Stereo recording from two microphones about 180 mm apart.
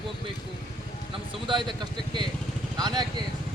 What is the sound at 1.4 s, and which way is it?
Speech, 25° right (ahead or behind).